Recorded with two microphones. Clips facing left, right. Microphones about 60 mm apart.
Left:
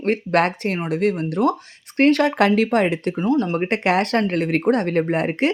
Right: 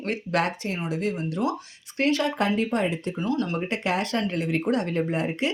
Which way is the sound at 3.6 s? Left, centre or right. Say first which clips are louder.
Left 7 dB; left.